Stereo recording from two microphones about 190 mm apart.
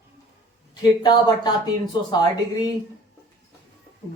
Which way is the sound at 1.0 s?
20° left (ahead or behind).